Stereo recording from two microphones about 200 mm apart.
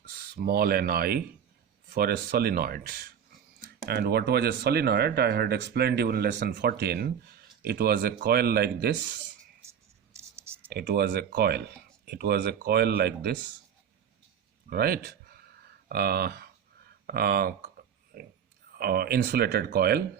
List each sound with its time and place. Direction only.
0.1 s speech: 50° right (ahead or behind)
10.2 s clicking: 15° right (ahead or behind)
10.7 s speech: 50° right (ahead or behind)
14.7 s a sound: 50° right (ahead or behind)
17.1 s speech: 50° right (ahead or behind)